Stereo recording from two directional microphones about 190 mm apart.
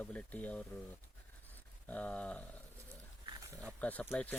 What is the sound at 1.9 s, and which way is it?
Speech, 5° left (ahead or behind).